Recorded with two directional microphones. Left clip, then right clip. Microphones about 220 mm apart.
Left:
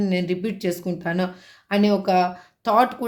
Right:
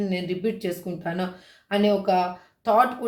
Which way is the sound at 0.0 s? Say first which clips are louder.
Left 2 dB; 40° left (ahead or behind).